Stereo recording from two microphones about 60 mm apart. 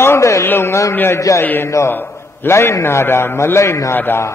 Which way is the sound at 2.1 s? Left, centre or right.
Left.